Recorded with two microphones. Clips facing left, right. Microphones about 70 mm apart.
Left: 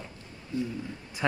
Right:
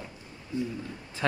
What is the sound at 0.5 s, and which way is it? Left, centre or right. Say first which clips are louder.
Speech: even; right.